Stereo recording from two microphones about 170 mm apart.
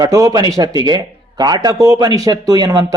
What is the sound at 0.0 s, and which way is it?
A man's voice, 20° right (ahead or behind).